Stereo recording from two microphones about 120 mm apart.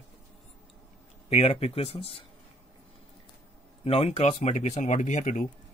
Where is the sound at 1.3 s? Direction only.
60° left (ahead or behind).